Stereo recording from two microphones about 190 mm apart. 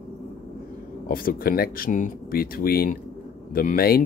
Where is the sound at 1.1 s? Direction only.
50° left (ahead or behind).